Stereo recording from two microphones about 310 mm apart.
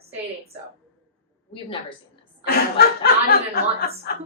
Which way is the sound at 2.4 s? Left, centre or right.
Left.